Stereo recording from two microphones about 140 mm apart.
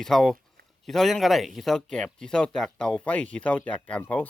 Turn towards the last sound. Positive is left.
turn(degrees=10)  # may be behind; listen again after turning